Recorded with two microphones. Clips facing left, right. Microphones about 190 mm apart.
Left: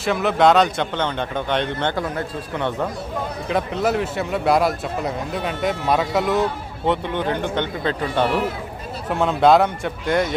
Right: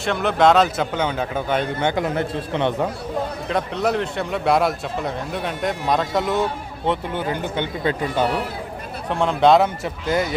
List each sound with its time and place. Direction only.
0.0 s speech: centre (ahead or behind)
2.0 s a man's voice: 25° right (ahead or behind)
3.5 s speech: centre (ahead or behind)
9.0 s speech: centre (ahead or behind)